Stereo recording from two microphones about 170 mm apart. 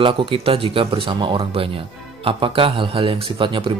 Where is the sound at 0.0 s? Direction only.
30° right (ahead or behind).